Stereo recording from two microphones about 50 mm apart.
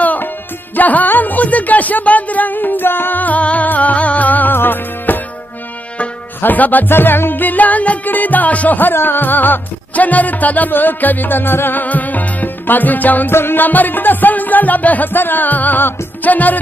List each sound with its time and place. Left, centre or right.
0.0 s music: left
6.4 s music: left
13.3 s music: left